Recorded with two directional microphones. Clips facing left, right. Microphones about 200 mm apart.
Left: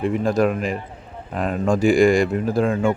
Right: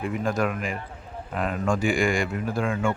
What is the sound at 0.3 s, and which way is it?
Speech, 35° left (ahead or behind).